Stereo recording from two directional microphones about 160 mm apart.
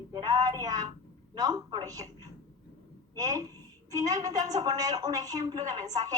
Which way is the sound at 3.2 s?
20° right (ahead or behind).